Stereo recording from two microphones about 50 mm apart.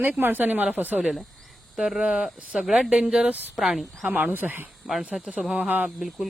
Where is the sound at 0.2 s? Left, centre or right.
Right.